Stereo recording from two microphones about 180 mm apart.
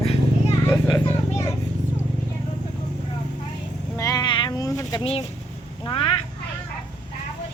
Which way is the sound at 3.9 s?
20° left (ahead or behind).